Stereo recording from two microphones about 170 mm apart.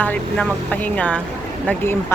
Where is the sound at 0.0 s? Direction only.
10° left (ahead or behind).